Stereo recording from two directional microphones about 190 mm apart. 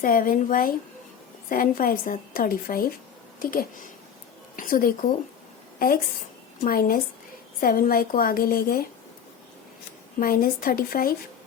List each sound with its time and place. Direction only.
0.0 s a woman's voice: 45° left (ahead or behind)
6.6 s a woman's voice: 50° left (ahead or behind)
10.2 s a woman's voice: 50° left (ahead or behind)